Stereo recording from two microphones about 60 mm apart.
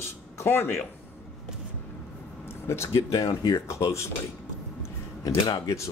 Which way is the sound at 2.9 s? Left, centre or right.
Left.